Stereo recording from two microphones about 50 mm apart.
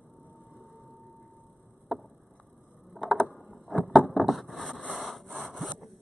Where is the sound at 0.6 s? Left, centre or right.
Centre.